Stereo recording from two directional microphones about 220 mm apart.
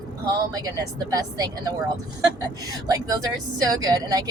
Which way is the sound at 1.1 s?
15° right (ahead or behind).